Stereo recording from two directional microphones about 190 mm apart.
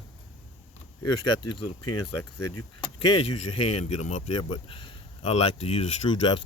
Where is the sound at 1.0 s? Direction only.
25° left (ahead or behind).